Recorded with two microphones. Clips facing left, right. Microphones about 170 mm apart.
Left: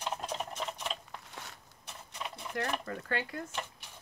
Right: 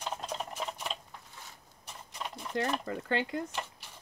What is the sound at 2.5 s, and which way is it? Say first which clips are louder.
Speech: right 3 dB; 25° right (ahead or behind).